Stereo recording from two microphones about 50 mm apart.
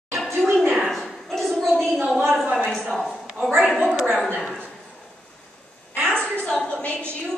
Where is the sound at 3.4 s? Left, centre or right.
Centre.